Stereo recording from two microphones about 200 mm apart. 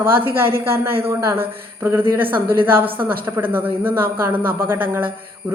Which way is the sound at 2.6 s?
10° right (ahead or behind).